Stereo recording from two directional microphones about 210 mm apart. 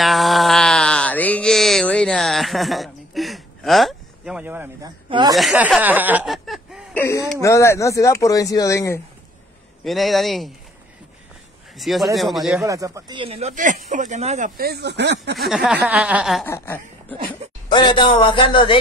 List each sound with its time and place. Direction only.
0.0 s mantra: centre (ahead or behind)
5.3 s speech: centre (ahead or behind)
7.0 s speech: 15° left (ahead or behind)
9.8 s speech: centre (ahead or behind)
11.7 s speech: centre (ahead or behind)
12.6 s speech: 15° right (ahead or behind); by 14.5 s 30° right (ahead or behind)
14.6 s speech: 50° right (ahead or behind)
15.3 s speech: centre (ahead or behind)
16.4 s speech: 10° left (ahead or behind)
17.6 s speech: 20° left (ahead or behind)